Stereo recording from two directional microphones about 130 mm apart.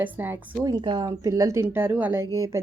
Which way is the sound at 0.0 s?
15° right (ahead or behind).